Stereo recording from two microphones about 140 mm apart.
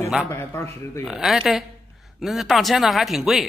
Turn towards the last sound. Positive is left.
turn(degrees=0)  # may be behind; listen again after turning